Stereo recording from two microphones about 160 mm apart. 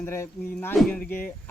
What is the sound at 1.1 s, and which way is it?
Speech, 10° left (ahead or behind).